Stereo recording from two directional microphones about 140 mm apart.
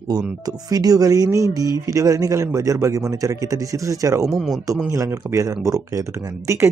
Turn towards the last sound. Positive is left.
turn(degrees=-20)  # may be behind; listen again after turning